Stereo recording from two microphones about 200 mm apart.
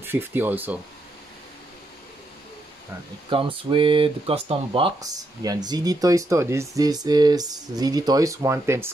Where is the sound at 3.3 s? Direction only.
25° right (ahead or behind).